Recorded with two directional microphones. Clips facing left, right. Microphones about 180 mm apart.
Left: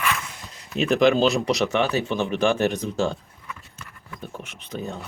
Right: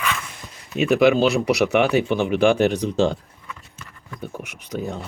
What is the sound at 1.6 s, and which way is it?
Speech, 15° right (ahead or behind).